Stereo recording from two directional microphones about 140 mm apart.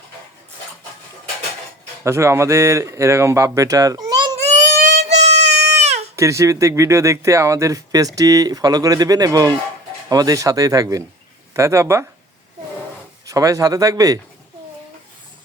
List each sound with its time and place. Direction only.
2.0 s speech: 20° right (ahead or behind)
4.5 s a sound: 55° right (ahead or behind)
6.1 s speech: 20° right (ahead or behind)
13.2 s speech: 25° right (ahead or behind)